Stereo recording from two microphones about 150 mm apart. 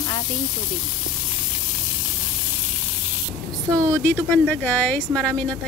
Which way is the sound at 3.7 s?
20° right (ahead or behind).